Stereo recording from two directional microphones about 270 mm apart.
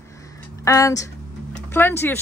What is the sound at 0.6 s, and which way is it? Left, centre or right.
Speech, centre.